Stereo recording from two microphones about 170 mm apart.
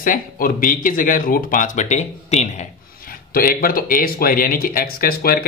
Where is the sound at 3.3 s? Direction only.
60° left (ahead or behind).